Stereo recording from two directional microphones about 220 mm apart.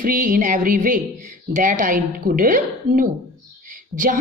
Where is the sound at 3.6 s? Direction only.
35° right (ahead or behind).